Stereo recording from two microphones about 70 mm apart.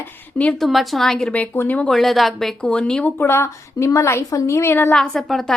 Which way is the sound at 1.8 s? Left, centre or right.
Centre.